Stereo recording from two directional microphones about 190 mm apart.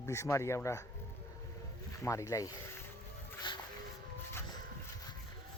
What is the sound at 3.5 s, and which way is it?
Music, 25° left (ahead or behind).